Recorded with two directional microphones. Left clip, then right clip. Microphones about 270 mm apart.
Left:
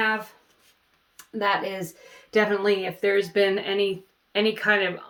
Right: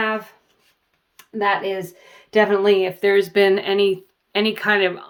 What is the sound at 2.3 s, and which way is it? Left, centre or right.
Speech, right.